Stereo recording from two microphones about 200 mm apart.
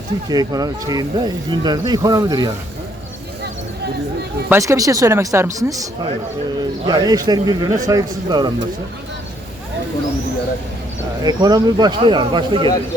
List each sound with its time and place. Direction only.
0.3 s speech: 20° right (ahead or behind)
4.4 s speech: 15° right (ahead or behind)
11.2 s speech: 20° right (ahead or behind)